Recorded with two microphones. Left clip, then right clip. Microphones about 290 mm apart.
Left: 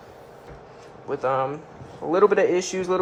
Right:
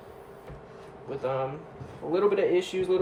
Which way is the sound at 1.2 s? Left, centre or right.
Centre.